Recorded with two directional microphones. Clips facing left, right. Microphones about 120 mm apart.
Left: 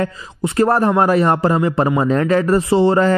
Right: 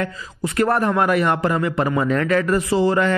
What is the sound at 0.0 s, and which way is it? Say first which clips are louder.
A man's voice: left 4 dB; 30° left (ahead or behind).